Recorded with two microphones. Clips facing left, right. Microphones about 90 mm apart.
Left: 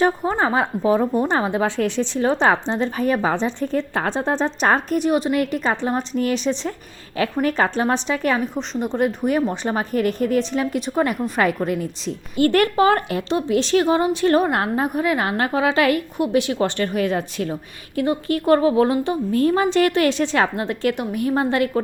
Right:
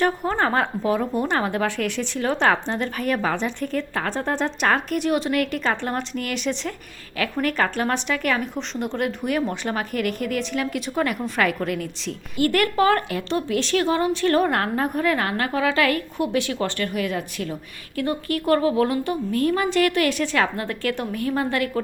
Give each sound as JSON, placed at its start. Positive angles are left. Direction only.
{"t": 0.3, "sound": "a woman's voice", "side_deg": 15}